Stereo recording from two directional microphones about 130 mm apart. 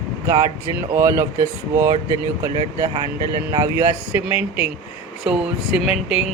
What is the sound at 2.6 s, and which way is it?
Speech, 45° right (ahead or behind).